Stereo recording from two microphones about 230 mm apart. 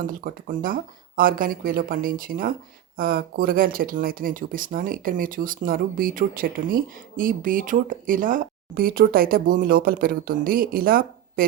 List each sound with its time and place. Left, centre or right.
0.1 s speech: right